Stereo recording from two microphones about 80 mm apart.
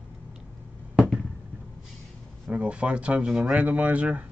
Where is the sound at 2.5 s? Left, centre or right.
Centre.